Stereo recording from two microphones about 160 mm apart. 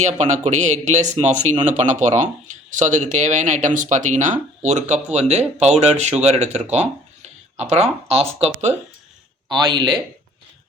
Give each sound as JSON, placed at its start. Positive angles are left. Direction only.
{"t": 0.0, "sound": "a man's voice", "side_deg": -45}
{"t": 9.5, "sound": "a man's voice", "side_deg": -25}